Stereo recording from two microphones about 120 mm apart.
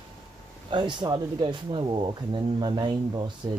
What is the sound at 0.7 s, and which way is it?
Speech, 40° right (ahead or behind).